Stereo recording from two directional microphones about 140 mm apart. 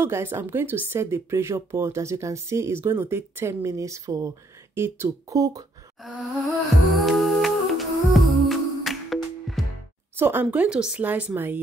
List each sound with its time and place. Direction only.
0.0 s a woman's voice: 15° right (ahead or behind)
6.9 s humming: centre (ahead or behind)
10.1 s a woman's voice: 15° right (ahead or behind)